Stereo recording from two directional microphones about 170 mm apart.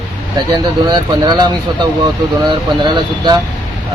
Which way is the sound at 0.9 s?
25° right (ahead or behind).